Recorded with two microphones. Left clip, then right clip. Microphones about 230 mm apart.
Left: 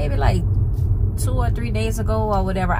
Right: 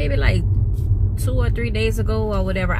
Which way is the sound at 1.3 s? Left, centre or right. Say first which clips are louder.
Right 2 dB; left.